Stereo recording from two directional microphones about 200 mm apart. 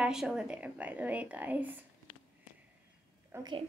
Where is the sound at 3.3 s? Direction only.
20° right (ahead or behind).